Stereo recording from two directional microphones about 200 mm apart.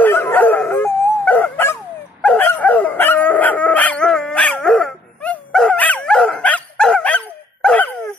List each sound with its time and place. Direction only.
0.0 s dog: 10° left (ahead or behind)